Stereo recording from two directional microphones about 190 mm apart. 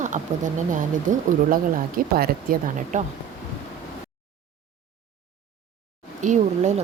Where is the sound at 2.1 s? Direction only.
50° right (ahead or behind).